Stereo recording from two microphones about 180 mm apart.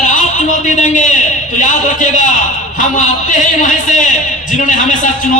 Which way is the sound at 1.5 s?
45° left (ahead or behind).